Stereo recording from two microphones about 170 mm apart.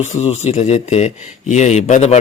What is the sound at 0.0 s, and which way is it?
Speech, 40° left (ahead or behind).